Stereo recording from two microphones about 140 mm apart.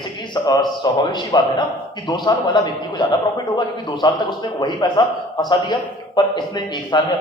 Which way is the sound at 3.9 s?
30° left (ahead or behind).